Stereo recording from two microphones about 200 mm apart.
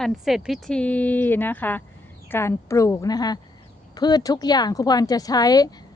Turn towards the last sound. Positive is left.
turn(degrees=20)  # may be behind; listen again after turning